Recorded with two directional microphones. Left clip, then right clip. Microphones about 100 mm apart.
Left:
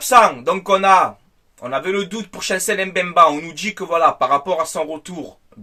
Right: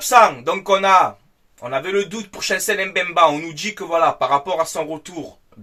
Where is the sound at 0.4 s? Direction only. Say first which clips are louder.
Left 2 dB; 50° left (ahead or behind).